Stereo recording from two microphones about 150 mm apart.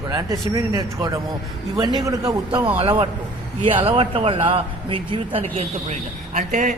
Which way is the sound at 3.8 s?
40° right (ahead or behind).